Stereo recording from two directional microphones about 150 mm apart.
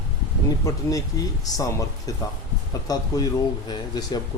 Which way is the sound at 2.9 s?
25° left (ahead or behind).